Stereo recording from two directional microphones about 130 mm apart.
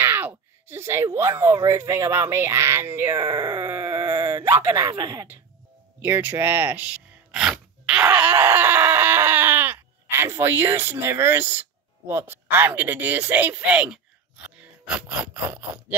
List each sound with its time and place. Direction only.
0.0 s speech: 15° right (ahead or behind)
5.9 s sneeze: 15° right (ahead or behind)
12.1 s speech: 15° right (ahead or behind)